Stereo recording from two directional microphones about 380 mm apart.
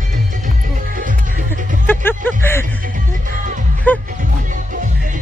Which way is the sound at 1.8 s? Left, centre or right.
Centre.